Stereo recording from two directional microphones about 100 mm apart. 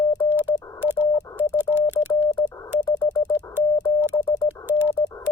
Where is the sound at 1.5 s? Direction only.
20° right (ahead or behind).